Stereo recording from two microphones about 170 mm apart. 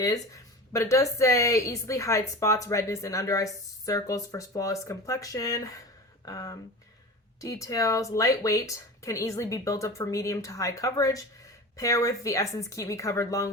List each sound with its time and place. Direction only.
0.7 s a woman's voice: 15° left (ahead or behind)